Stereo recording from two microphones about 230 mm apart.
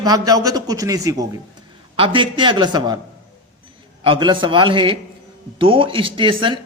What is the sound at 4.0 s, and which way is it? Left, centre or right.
Speech, right.